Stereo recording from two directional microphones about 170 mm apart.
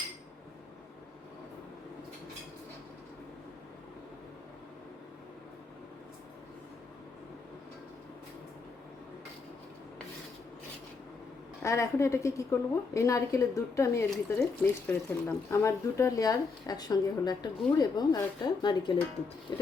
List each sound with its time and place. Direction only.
11.6 s a woman's voice: 15° left (ahead or behind)